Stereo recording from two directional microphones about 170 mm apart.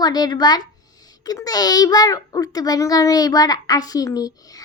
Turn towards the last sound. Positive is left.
turn(degrees=20)  # may be behind; listen again after turning